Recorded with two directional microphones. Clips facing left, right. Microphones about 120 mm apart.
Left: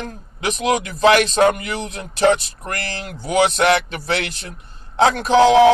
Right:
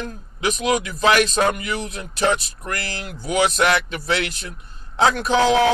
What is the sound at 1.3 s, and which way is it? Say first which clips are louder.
Speech: left 4 dB; 25° left (ahead or behind).